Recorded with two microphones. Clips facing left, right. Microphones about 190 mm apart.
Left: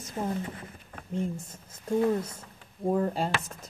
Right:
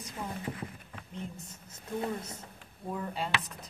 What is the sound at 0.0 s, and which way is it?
Speech, 45° left (ahead or behind).